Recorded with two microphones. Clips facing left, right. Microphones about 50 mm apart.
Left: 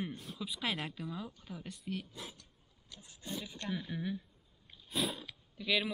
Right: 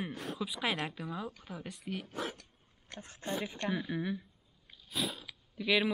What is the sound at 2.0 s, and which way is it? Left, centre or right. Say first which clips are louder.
Speech: right 10 dB; right.